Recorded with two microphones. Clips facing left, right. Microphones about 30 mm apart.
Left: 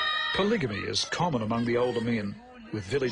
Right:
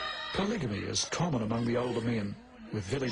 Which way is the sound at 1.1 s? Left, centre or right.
Left.